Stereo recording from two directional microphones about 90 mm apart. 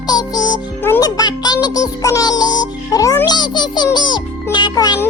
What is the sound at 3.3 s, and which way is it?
Music, 55° left (ahead or behind).